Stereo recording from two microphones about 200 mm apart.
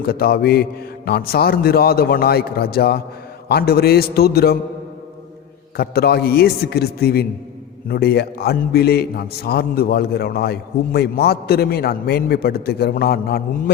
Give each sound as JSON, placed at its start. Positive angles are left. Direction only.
{"t": 0.0, "sound": "a man's voice", "side_deg": 50}
{"t": 5.7, "sound": "a man's voice", "side_deg": 50}